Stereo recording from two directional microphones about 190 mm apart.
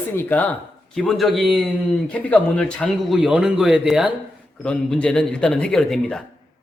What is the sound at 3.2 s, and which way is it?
Speech, 5° right (ahead or behind).